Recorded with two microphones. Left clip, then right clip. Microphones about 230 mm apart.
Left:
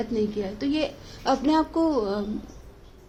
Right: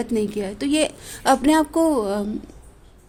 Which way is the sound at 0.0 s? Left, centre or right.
Right.